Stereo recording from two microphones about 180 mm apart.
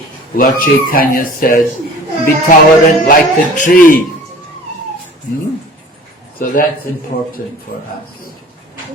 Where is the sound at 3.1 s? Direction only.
45° left (ahead or behind).